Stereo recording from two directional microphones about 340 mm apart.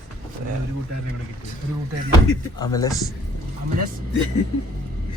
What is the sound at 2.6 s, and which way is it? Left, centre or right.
Speech, centre.